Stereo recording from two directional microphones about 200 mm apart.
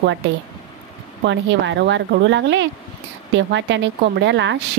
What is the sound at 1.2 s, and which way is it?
Speech, 60° right (ahead or behind).